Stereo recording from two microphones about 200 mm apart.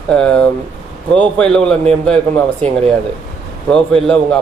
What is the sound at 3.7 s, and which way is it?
Speech, 5° left (ahead or behind).